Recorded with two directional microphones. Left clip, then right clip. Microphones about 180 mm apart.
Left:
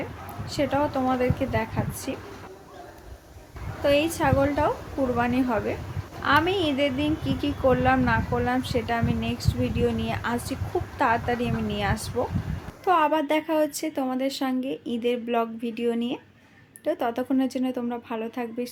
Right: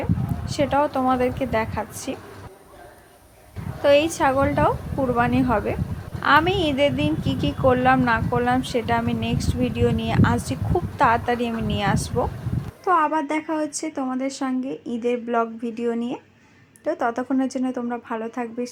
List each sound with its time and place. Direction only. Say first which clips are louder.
0.4 s a woman's voice: right 4 dB; 15° right (ahead or behind)
3.8 s a woman's voice: right 5 dB; 15° right (ahead or behind)